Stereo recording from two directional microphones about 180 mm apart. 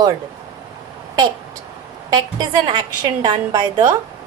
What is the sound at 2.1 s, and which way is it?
A woman's voice, 25° right (ahead or behind).